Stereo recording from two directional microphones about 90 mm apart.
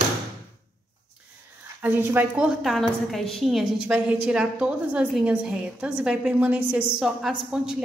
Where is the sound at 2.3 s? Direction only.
10° right (ahead or behind).